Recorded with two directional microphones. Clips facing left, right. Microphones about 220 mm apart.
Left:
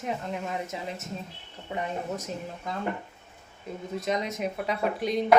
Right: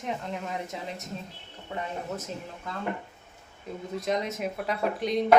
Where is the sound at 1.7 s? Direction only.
15° left (ahead or behind).